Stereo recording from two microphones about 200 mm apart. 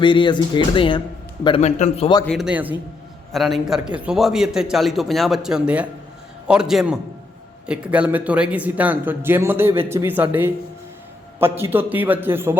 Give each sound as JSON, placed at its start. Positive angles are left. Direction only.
{"t": 0.0, "sound": "a man's voice", "side_deg": 25}
{"t": 2.2, "sound": "a man's voice", "side_deg": 0}